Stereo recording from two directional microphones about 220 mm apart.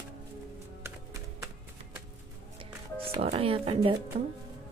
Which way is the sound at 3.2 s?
25° right (ahead or behind).